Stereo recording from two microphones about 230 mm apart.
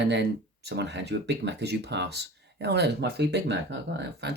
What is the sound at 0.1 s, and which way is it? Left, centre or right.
Speech, right.